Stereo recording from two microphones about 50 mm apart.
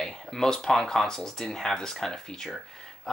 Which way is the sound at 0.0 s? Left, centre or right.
Centre.